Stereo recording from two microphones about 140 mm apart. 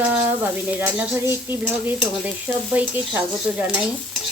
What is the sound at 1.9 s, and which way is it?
Speech, centre (ahead or behind).